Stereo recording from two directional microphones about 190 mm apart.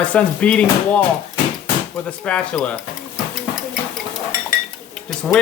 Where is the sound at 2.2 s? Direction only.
5° left (ahead or behind).